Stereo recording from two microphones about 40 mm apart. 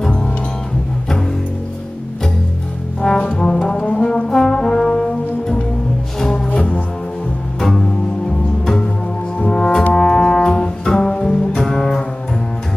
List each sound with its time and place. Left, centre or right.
3.0 s brass instrument: centre
6.1 s music: centre
6.5 s music: left
9.5 s brass instrument: left
9.9 s music: centre